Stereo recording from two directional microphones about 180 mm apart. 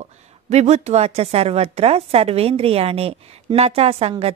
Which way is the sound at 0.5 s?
35° right (ahead or behind).